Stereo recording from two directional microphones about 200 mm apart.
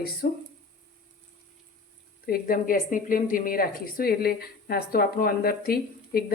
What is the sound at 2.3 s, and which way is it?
Speech, 45° left (ahead or behind).